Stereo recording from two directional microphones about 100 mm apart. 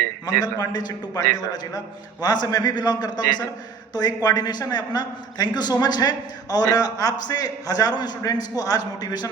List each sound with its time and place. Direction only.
0.3 s a man's voice: 40° left (ahead or behind)
2.2 s a man's voice: 40° left (ahead or behind)